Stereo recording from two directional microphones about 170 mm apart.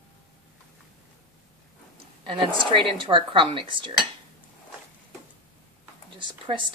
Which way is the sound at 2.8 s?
30° right (ahead or behind).